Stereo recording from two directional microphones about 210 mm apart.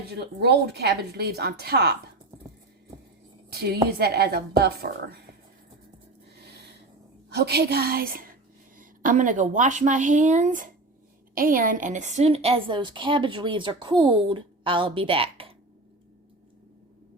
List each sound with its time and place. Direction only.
0.1 s speech: 50° right (ahead or behind)
3.5 s speech: 50° right (ahead or behind)
6.4 s a sound: 50° right (ahead or behind)
7.3 s a woman's voice: 50° right (ahead or behind); by 15.5 s 25° right (ahead or behind)